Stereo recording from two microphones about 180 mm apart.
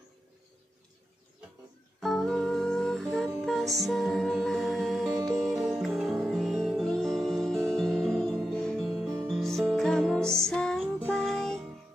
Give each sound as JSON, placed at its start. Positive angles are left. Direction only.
{"t": 2.0, "sound": "music", "side_deg": 0}
{"t": 9.0, "sound": "music", "side_deg": -15}
{"t": 9.3, "sound": "music", "side_deg": 0}